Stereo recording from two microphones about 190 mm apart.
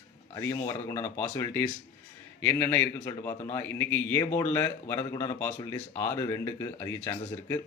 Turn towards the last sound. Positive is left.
turn(degrees=15)  # may be behind; listen again after turning